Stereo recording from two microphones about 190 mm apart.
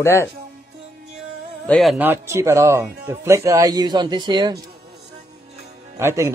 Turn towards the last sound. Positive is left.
turn(degrees=-15)  # may be behind; listen again after turning